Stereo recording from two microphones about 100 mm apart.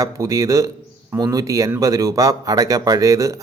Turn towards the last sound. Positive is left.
turn(degrees=-35)  # may be behind; listen again after turning